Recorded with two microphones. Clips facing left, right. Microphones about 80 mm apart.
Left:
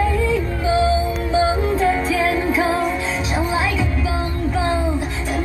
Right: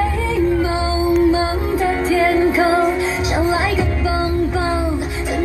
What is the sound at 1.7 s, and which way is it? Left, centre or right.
Music, centre.